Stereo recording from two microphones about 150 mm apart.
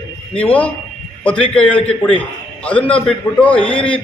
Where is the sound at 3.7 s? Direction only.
35° left (ahead or behind).